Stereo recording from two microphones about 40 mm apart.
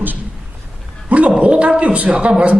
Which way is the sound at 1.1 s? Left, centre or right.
Right.